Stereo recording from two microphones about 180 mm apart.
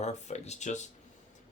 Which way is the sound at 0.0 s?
40° left (ahead or behind).